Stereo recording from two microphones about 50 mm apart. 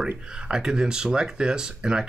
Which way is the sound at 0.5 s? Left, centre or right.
Centre.